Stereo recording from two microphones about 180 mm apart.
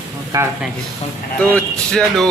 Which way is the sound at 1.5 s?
5° left (ahead or behind).